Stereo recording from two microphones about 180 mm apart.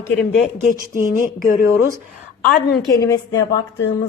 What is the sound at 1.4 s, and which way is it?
Speech, 55° left (ahead or behind).